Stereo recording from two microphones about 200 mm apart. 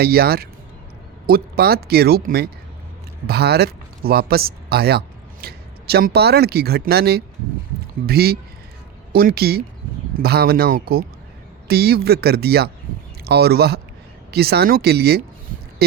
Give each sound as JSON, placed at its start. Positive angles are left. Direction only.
{"t": 0.0, "sound": "speech", "side_deg": -50}